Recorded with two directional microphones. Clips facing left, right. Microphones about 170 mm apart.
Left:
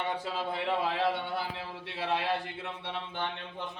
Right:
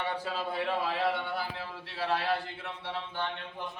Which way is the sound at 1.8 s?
20° left (ahead or behind).